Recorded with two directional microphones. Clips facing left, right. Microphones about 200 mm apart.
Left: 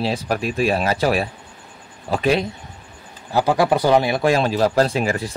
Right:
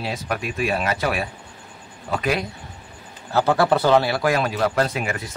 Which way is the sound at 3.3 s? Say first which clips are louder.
Left 1 dB; 15° left (ahead or behind).